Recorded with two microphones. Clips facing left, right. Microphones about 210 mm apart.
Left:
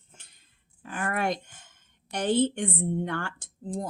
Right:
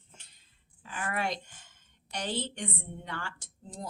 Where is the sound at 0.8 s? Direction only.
55° left (ahead or behind).